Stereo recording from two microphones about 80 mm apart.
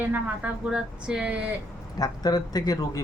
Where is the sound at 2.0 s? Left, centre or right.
Left.